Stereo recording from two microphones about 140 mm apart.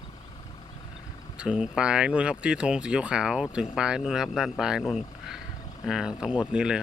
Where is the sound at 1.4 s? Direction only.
5° right (ahead or behind).